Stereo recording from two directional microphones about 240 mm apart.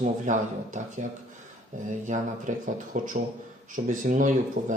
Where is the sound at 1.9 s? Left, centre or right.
Right.